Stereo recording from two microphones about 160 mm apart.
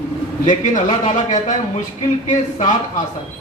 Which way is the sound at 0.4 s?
50° left (ahead or behind).